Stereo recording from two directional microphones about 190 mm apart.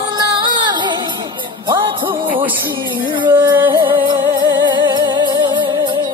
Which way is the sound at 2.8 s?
25° right (ahead or behind).